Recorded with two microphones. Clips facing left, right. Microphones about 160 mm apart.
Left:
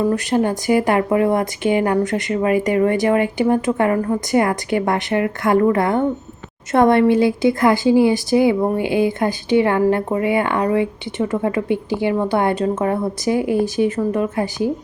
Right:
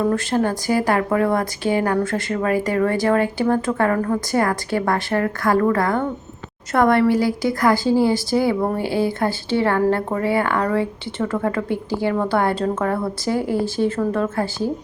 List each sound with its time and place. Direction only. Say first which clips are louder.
0.0 s a woman's voice: left 2 dB; 15° left (ahead or behind)